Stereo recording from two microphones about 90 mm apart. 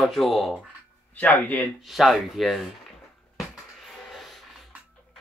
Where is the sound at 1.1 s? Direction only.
20° left (ahead or behind).